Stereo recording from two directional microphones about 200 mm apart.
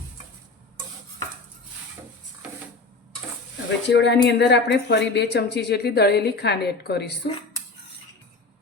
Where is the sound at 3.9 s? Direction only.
60° left (ahead or behind).